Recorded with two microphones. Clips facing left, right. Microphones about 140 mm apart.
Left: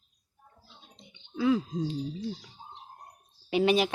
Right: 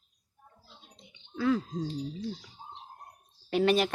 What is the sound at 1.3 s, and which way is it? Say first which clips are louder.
Speech: left 2 dB; 10° left (ahead or behind).